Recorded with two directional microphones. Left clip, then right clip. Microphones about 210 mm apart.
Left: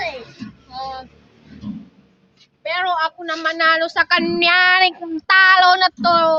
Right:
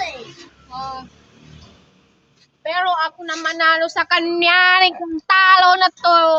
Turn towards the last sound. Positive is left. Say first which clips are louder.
# right 2 dB
turn(degrees=0)  # may be behind; listen again after turning